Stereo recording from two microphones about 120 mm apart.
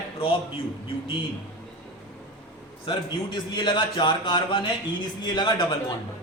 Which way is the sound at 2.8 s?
40° left (ahead or behind).